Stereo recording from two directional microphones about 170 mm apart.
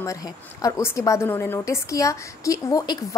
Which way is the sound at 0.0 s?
20° left (ahead or behind).